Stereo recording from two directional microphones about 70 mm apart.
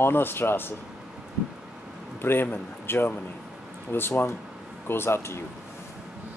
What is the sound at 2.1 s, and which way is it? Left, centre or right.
Speech, left.